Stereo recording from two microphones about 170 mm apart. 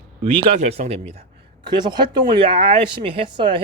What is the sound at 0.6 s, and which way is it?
Speech, 35° right (ahead or behind).